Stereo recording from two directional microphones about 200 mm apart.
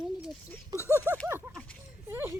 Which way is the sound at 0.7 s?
15° left (ahead or behind).